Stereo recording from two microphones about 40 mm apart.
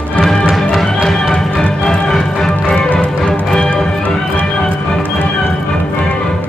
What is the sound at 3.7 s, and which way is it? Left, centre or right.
Music, centre.